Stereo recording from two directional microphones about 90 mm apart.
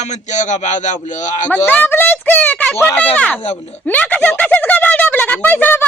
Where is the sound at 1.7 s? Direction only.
20° left (ahead or behind).